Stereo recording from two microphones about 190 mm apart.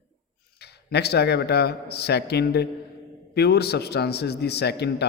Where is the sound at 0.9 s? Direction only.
60° left (ahead or behind).